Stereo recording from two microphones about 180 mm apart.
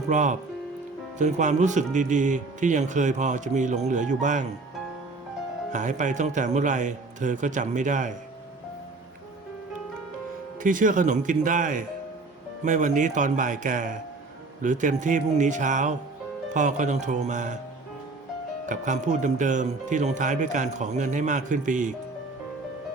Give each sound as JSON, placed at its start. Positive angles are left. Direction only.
{"t": 0.1, "sound": "speech", "side_deg": -45}
{"t": 5.7, "sound": "speech", "side_deg": -45}
{"t": 10.6, "sound": "speech", "side_deg": -45}
{"t": 18.6, "sound": "speech", "side_deg": -45}